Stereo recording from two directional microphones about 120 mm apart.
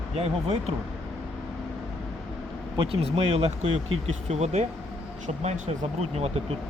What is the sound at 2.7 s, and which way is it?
Speech, 40° right (ahead or behind).